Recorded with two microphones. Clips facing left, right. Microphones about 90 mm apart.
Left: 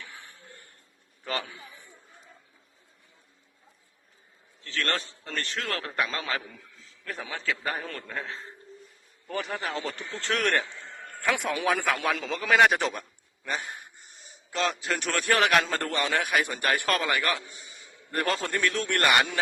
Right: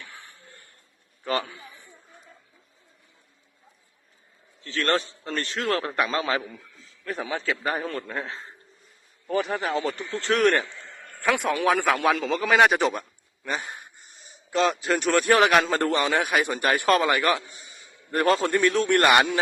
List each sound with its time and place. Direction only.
1.2 s a sound: 5° right (ahead or behind)
4.6 s a man's voice: 20° right (ahead or behind)
9.7 s a man's voice: 5° right (ahead or behind)
11.2 s a man's voice: centre (ahead or behind); by 19.1 s 20° right (ahead or behind)